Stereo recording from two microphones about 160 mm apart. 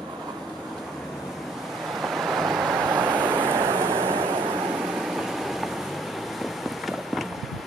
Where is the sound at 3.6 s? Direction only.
30° right (ahead or behind).